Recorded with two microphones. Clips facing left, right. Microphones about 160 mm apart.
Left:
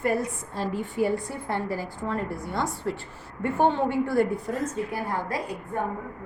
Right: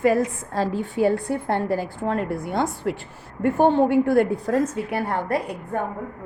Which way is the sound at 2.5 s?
55° right (ahead or behind).